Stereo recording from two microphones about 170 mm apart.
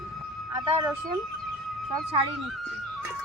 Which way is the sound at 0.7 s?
25° right (ahead or behind).